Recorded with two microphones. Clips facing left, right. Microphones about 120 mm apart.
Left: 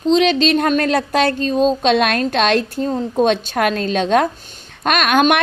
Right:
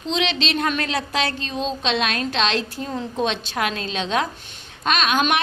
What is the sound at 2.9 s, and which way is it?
A woman's voice, 40° left (ahead or behind).